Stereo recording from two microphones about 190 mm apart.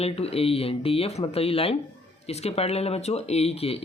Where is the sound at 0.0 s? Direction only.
30° left (ahead or behind).